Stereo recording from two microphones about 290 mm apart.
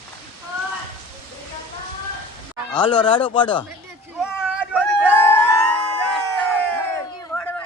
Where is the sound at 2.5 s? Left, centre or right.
Centre.